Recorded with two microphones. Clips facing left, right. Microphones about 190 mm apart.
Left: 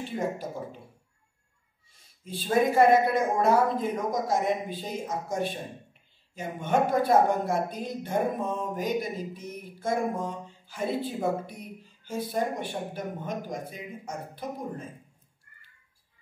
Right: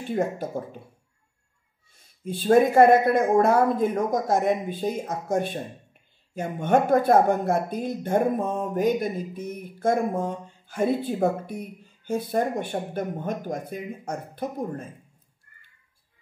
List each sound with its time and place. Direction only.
0.1 s speech: 50° right (ahead or behind)
2.2 s speech: 55° right (ahead or behind)